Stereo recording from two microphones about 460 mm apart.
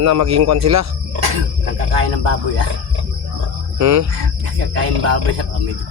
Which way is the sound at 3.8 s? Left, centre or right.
Right.